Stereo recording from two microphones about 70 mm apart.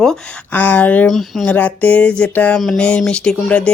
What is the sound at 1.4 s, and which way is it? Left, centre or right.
Speech, left.